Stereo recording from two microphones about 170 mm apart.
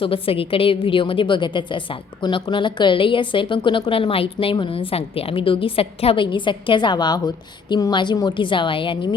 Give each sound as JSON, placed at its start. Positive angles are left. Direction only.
{"t": 0.0, "sound": "a woman's voice", "side_deg": 35}